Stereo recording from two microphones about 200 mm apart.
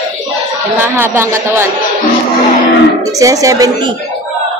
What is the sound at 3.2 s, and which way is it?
Speech, 15° right (ahead or behind).